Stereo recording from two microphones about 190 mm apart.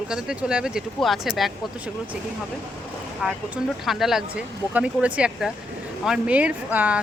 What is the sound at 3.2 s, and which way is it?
Speech, centre (ahead or behind).